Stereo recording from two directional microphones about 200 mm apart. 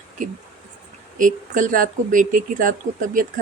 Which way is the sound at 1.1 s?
40° right (ahead or behind).